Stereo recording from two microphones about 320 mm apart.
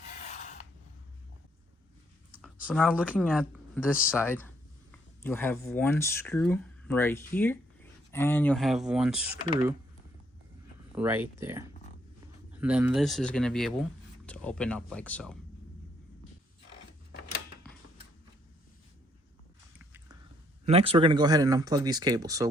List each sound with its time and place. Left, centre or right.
0.3 s rub: left
2.4 s speech: centre
4.1 s speech: centre
10.9 s speech: centre
19.8 s a sound: centre
20.7 s speech: centre